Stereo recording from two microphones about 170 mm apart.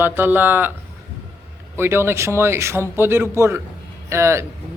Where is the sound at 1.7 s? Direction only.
15° right (ahead or behind).